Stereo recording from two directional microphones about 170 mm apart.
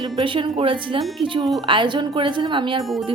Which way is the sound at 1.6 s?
30° right (ahead or behind).